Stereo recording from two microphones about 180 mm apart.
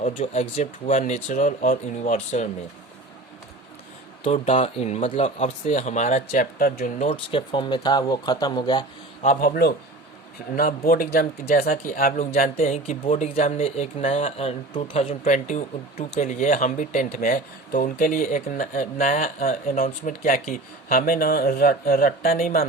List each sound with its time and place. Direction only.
0.1 s speech: 35° left (ahead or behind)
4.2 s speech: 35° left (ahead or behind)
7.1 s speech: 30° left (ahead or behind)
9.2 s speech: 45° left (ahead or behind)
12.6 s speech: 35° left (ahead or behind); by 22.6 s 55° left (ahead or behind)